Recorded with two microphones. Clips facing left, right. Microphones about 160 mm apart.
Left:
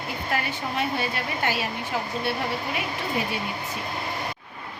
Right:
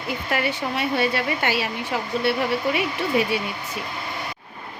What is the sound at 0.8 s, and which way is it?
Speech, 85° right.